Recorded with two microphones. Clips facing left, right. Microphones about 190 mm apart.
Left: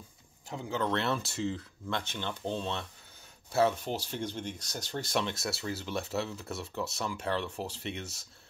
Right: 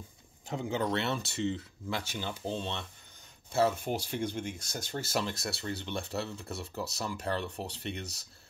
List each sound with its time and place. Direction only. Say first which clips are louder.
0.5 s speech: right 1 dB; 20° right (ahead or behind)
0.9 s speech: left 1 dB; centre (ahead or behind)